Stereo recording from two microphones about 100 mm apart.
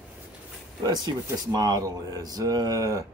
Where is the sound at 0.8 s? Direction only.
45° right (ahead or behind).